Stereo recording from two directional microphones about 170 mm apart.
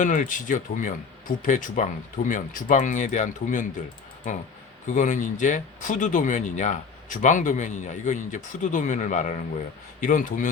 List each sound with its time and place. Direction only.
0.0 s speech: 50° left (ahead or behind)
4.9 s speech: 50° left (ahead or behind)